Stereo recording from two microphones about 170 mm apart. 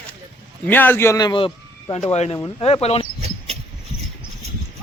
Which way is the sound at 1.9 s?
40° left (ahead or behind).